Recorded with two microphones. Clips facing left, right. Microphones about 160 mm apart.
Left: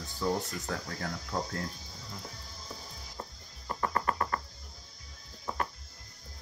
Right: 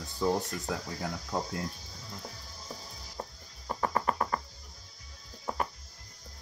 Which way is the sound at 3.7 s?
10° right (ahead or behind).